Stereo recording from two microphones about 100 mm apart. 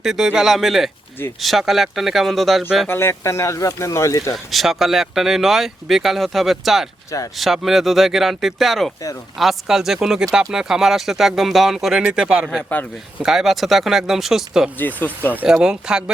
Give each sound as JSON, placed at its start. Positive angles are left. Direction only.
{"t": 0.0, "sound": "speech", "side_deg": -5}
{"t": 2.8, "sound": "speech", "side_deg": 25}
{"t": 4.5, "sound": "speech", "side_deg": 0}
{"t": 14.8, "sound": "speech", "side_deg": 15}
{"t": 15.4, "sound": "speech", "side_deg": -5}